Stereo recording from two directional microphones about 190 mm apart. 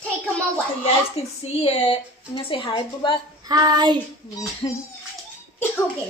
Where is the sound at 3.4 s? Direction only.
20° right (ahead or behind).